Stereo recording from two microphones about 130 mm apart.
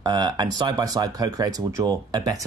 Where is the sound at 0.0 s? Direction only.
35° right (ahead or behind).